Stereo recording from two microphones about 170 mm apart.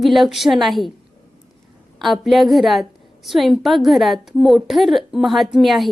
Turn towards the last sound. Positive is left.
turn(degrees=0)  # may be behind; listen again after turning